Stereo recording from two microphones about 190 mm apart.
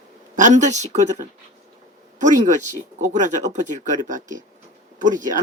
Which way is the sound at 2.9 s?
40° right (ahead or behind).